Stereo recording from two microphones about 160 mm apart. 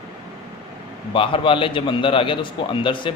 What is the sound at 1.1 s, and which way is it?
A man's voice, 35° left (ahead or behind).